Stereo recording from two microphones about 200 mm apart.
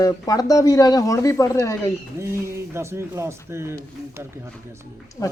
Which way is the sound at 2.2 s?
15° right (ahead or behind).